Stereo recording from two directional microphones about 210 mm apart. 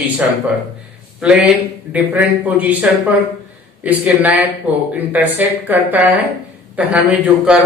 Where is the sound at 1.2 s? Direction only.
5° right (ahead or behind).